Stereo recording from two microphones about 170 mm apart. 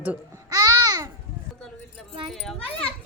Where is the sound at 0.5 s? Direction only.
20° right (ahead or behind).